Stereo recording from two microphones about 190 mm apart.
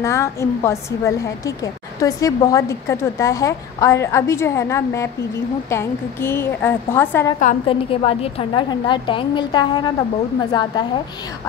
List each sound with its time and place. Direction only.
0.0 s a woman's voice: 15° left (ahead or behind)
7.6 s a woman's voice: 30° left (ahead or behind)